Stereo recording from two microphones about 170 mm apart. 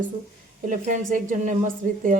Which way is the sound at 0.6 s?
50° right (ahead or behind).